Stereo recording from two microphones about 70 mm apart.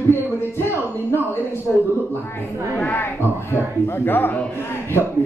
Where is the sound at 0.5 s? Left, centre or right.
Left.